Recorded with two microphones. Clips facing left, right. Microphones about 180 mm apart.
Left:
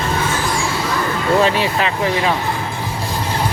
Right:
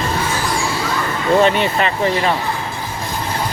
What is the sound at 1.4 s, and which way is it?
Speech, centre (ahead or behind).